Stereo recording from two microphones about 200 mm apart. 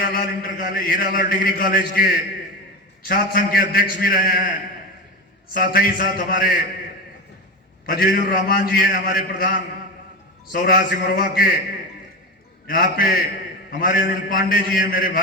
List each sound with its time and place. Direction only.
0.0 s a man's voice: 45° left (ahead or behind)
5.5 s a man's voice: 45° left (ahead or behind)
7.9 s a man's voice: 45° left (ahead or behind)
12.6 s a man's voice: 45° left (ahead or behind)